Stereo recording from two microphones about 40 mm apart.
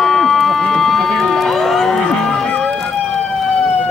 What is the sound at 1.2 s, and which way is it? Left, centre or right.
Music, centre.